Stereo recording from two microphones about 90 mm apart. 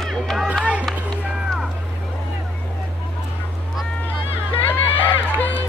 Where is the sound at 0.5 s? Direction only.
15° right (ahead or behind).